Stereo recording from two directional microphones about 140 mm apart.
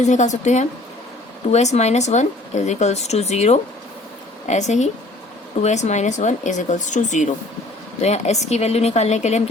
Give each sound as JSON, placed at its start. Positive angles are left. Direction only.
{"t": 0.0, "sound": "speech", "side_deg": 60}